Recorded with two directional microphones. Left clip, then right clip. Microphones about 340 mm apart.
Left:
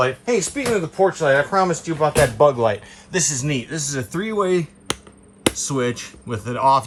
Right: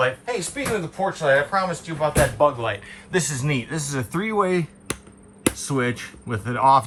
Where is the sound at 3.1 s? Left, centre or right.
Centre.